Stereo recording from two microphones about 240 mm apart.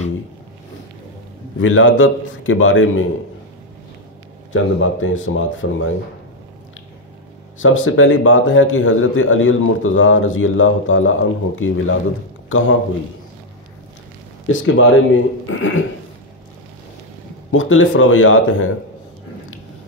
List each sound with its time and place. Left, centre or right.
1.6 s a man's voice: left
4.5 s a man's voice: left
7.6 s a man's voice: left
14.5 s speech: left
17.5 s a man's voice: left